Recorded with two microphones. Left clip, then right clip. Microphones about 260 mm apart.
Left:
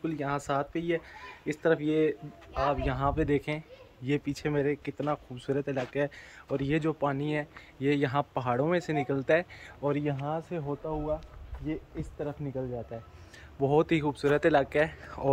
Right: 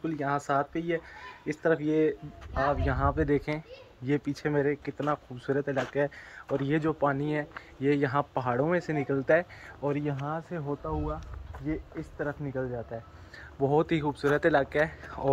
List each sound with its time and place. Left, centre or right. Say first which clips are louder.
0.0 s speech: right 2 dB; centre
12.2 s speech: right 3 dB; centre
13.6 s speech: even; centre